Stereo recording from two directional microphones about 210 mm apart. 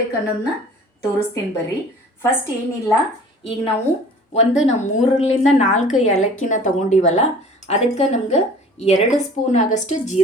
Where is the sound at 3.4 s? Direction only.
25° left (ahead or behind).